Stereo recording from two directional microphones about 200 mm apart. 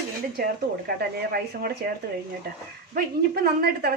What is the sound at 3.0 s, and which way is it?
Speech, 50° right (ahead or behind).